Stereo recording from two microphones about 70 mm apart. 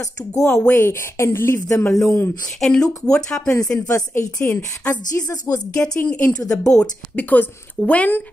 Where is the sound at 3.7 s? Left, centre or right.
Left.